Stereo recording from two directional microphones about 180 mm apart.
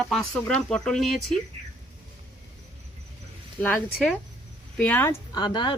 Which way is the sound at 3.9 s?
Centre (ahead or behind).